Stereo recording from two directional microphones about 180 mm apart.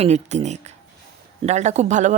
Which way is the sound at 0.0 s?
40° right (ahead or behind).